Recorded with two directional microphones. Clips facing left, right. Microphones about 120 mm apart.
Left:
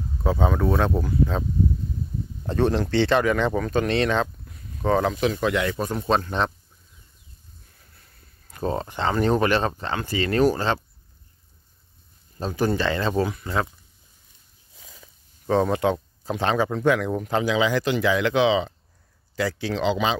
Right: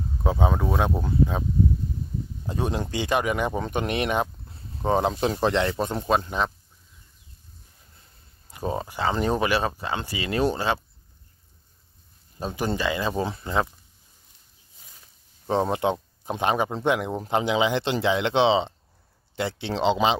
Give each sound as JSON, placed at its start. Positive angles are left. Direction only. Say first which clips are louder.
{"t": 0.2, "sound": "speech", "louder": "left 2 dB", "side_deg": -15}
{"t": 2.4, "sound": "speech", "louder": "left 6 dB", "side_deg": -10}
{"t": 4.5, "sound": "speech", "louder": "left 2 dB", "side_deg": -25}
{"t": 6.0, "sound": "speech", "louder": "left 2 dB", "side_deg": -10}
{"t": 8.5, "sound": "speech", "louder": "left 2 dB", "side_deg": -10}
{"t": 12.5, "sound": "speech", "louder": "left 3 dB", "side_deg": -15}
{"t": 13.2, "sound": "speech", "louder": "left 1 dB", "side_deg": -25}
{"t": 15.4, "sound": "speech", "louder": "left 2 dB", "side_deg": -20}